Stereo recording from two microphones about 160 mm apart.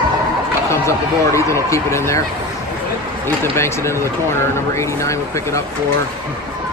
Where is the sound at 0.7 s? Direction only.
15° left (ahead or behind).